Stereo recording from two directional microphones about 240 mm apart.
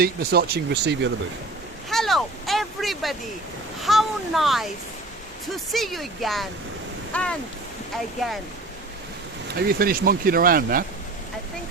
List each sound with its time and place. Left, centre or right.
0.0 s speech: right
1.9 s a sound: centre
3.8 s a child's voice: centre
5.7 s a child's voice: centre
9.6 s speech: right